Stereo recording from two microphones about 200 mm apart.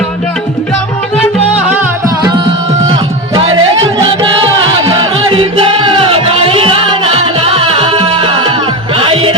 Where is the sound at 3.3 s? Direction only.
25° right (ahead or behind).